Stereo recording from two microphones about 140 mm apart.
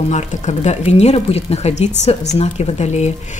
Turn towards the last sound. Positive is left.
turn(degrees=55)  # may be behind; listen again after turning